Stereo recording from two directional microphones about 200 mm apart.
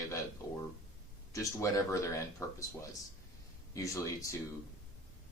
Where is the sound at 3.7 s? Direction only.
15° left (ahead or behind).